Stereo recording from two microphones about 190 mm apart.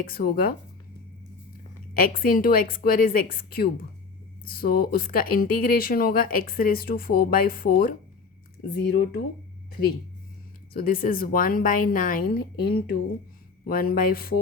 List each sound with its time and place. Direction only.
0.0 s speech: 50° left (ahead or behind)
2.0 s speech: 50° left (ahead or behind)
8.7 s speech: 60° left (ahead or behind)
10.8 s speech: 50° left (ahead or behind)